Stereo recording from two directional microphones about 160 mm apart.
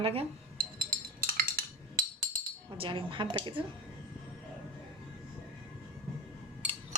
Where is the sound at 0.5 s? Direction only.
65° right (ahead or behind).